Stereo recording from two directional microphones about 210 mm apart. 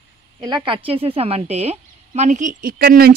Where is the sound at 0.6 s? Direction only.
25° right (ahead or behind).